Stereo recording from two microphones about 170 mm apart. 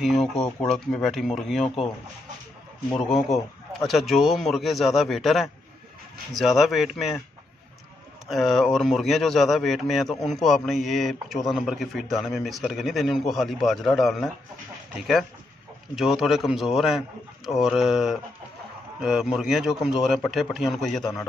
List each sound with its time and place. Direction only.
0.0 s a man's voice: centre (ahead or behind)
3.8 s a man's voice: centre (ahead or behind)
8.3 s a man's voice: centre (ahead or behind)
21.0 s a man's voice: 15° left (ahead or behind)